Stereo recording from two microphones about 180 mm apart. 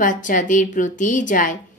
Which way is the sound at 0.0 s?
45° left (ahead or behind).